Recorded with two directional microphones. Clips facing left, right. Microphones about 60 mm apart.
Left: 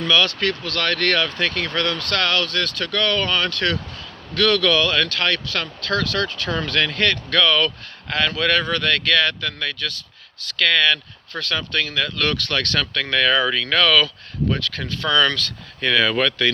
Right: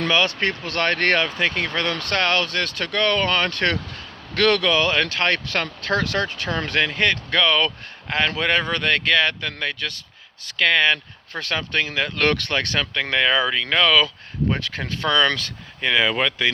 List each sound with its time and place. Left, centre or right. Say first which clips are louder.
0.1 s speech: left 3 dB; right
1.3 s speech: even; right
4.6 s speech: left 1 dB; right
12.1 s speech: right 6 dB; right
12.5 s speech: left 1 dB; right
15.8 s speech: left 1 dB; centre